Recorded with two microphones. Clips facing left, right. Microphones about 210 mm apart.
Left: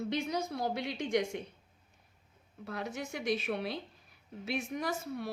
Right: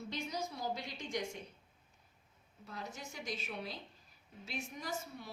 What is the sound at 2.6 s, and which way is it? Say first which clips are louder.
A woman's voice: left 8 dB; 65° left (ahead or behind).